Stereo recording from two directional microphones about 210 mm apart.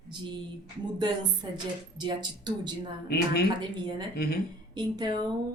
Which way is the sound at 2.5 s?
20° right (ahead or behind).